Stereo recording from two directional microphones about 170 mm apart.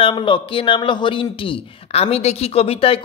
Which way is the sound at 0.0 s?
30° left (ahead or behind).